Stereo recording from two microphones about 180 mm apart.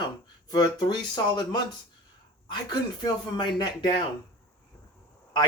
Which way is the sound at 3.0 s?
25° left (ahead or behind).